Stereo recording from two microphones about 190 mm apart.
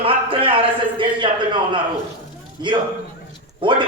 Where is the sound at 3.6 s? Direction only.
25° right (ahead or behind).